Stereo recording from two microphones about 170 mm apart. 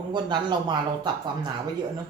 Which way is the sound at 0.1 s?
25° right (ahead or behind).